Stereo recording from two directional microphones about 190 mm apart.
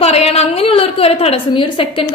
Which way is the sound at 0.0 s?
30° left (ahead or behind).